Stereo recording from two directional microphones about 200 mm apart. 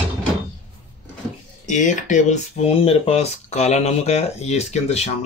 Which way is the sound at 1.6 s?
40° left (ahead or behind).